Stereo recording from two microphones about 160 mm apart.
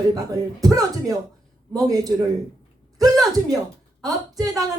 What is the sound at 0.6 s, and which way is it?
Speech, 20° right (ahead or behind).